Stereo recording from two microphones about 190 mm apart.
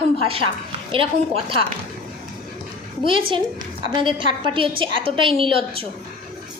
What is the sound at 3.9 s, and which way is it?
A woman's voice, 25° right (ahead or behind).